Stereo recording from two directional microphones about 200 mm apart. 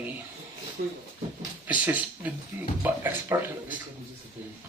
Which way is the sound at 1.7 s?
5° right (ahead or behind).